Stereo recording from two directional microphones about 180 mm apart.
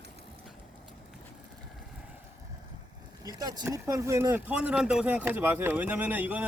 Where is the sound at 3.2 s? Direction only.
20° right (ahead or behind).